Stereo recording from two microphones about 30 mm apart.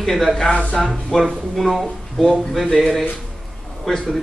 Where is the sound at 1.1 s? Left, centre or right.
Left.